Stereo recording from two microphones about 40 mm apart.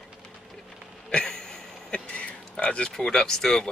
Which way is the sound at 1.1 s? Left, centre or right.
Centre.